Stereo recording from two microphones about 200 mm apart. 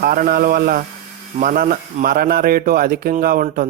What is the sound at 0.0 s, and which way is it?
A man's voice, 50° right (ahead or behind).